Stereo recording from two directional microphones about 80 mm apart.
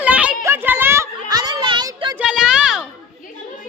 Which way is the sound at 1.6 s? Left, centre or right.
Right.